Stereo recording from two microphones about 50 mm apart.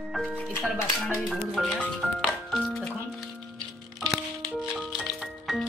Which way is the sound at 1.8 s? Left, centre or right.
Centre.